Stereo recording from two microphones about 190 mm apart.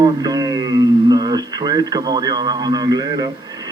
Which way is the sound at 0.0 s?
20° right (ahead or behind).